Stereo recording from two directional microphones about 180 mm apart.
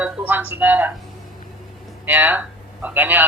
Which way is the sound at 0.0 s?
10° right (ahead or behind).